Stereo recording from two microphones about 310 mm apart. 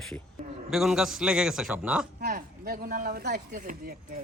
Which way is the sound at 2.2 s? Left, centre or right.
Right.